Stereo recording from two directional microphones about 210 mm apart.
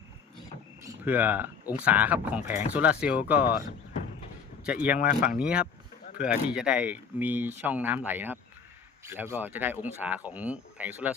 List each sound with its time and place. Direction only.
0.8 s a sound: 10° right (ahead or behind)
1.7 s speech: 5° right (ahead or behind)
4.9 s speech: 45° left (ahead or behind)
5.4 s speech: 5° right (ahead or behind)